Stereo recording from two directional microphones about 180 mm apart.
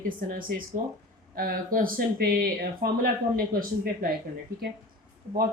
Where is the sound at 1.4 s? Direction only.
50° right (ahead or behind).